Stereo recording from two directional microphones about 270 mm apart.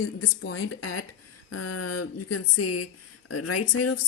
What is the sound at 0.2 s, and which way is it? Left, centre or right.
A woman's voice, left.